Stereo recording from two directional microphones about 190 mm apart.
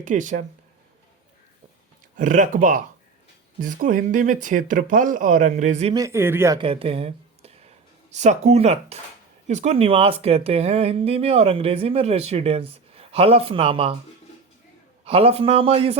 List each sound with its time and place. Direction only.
0.0 s speech: 40° right (ahead or behind)
2.1 s speech: 45° right (ahead or behind)
5.9 s speech: 15° right (ahead or behind)
6.6 s speech: 30° right (ahead or behind)
15.0 s speech: 30° right (ahead or behind)